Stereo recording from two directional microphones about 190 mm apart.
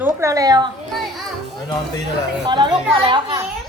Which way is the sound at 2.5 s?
25° right (ahead or behind).